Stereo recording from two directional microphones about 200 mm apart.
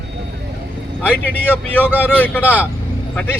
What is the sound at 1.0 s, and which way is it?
Speech, 10° left (ahead or behind).